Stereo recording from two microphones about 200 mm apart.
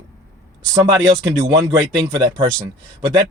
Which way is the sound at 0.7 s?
15° right (ahead or behind).